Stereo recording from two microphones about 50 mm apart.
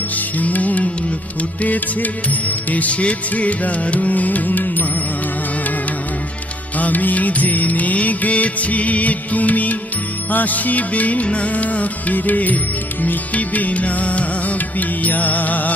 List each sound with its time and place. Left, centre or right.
0.4 s music: left
6.8 s music: left